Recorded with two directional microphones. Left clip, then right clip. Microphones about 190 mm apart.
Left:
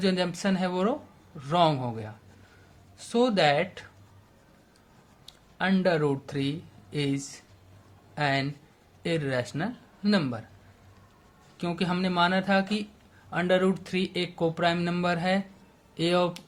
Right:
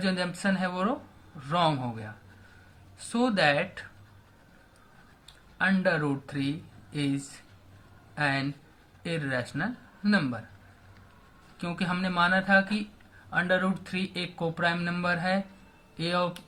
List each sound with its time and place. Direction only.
0.0 s speech: 35° left (ahead or behind)
5.5 s speech: 35° left (ahead or behind)
11.5 s speech: 35° left (ahead or behind)